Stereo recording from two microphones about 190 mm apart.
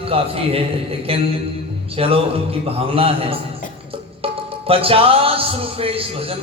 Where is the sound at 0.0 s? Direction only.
30° right (ahead or behind).